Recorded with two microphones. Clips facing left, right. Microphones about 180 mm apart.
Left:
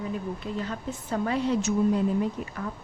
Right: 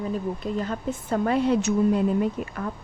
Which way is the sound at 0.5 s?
45° right (ahead or behind).